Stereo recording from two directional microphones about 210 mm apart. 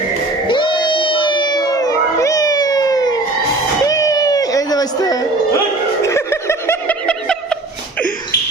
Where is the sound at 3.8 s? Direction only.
15° left (ahead or behind).